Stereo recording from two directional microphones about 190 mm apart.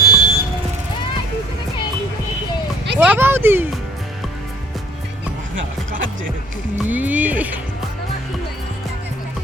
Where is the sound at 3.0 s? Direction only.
10° right (ahead or behind).